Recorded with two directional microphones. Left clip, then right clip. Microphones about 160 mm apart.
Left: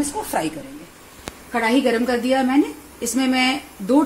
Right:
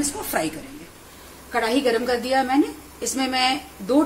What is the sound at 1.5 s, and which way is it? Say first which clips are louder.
A woman's voice: left 2 dB; 75° left (ahead or behind).